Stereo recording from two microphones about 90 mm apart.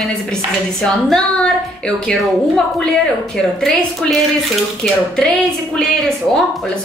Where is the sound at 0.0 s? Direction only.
10° left (ahead or behind).